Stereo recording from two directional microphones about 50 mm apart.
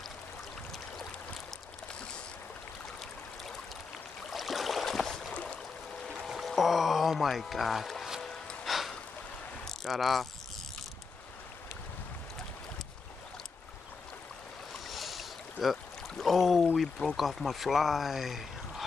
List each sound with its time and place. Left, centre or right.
4.3 s a sound: centre
5.3 s boat: left
6.1 s music: centre
8.6 s a sound: centre
9.8 s speech: centre
14.9 s boat: centre
16.7 s speech: centre